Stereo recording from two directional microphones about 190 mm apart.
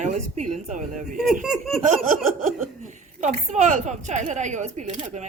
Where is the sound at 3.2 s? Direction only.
40° right (ahead or behind).